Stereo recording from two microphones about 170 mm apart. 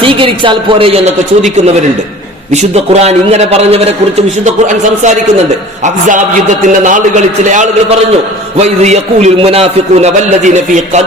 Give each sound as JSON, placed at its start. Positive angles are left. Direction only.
{"t": 0.0, "sound": "a man's voice", "side_deg": -30}